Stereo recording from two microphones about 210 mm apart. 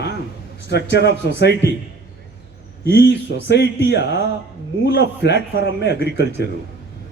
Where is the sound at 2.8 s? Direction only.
55° left (ahead or behind).